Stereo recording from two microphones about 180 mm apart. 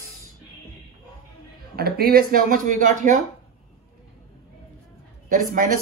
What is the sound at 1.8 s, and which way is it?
Speech, 55° right (ahead or behind).